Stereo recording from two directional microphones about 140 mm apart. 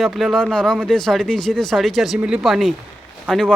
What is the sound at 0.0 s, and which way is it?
Speech, centre (ahead or behind).